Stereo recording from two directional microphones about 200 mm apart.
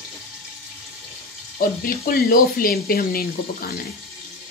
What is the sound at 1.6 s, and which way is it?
Speech, 45° left (ahead or behind).